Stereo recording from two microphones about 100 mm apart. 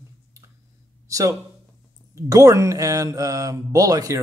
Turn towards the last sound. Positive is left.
turn(degrees=-35)  # may be behind; listen again after turning